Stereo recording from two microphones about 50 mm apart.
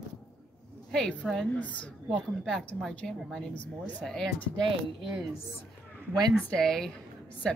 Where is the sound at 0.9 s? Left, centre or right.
Centre.